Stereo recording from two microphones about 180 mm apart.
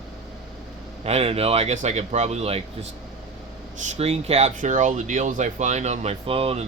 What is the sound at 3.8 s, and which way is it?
A man's voice, 35° right (ahead or behind).